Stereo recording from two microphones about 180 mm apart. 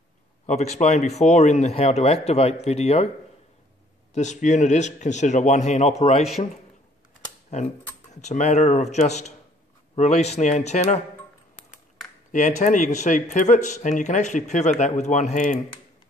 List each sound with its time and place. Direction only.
0.5 s speech: 40° left (ahead or behind)
4.1 s speech: 40° left (ahead or behind)
7.5 s speech: 40° left (ahead or behind)
12.3 s speech: 45° left (ahead or behind)